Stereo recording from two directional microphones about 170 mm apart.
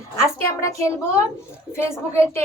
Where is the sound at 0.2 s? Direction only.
15° left (ahead or behind).